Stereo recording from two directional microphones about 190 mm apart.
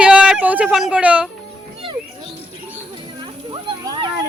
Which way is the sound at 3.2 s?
25° right (ahead or behind).